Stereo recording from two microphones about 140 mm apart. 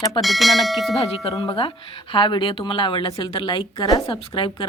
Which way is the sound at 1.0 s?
40° left (ahead or behind).